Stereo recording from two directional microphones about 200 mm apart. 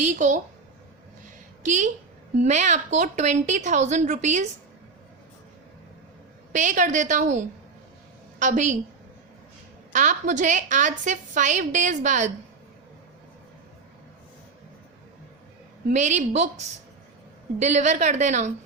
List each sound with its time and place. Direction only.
0.0 s a woman's voice: 35° right (ahead or behind)
1.6 s a woman's voice: 40° right (ahead or behind)
6.5 s a woman's voice: 40° right (ahead or behind)
9.9 s a woman's voice: 40° right (ahead or behind)
15.9 s a woman's voice: 35° right (ahead or behind)